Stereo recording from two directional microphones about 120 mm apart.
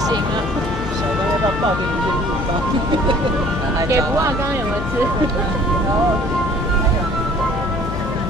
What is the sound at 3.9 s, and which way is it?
Speech, 25° right (ahead or behind).